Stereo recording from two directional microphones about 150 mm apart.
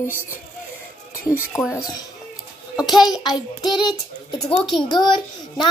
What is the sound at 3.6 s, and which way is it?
A woman's voice, 30° left (ahead or behind).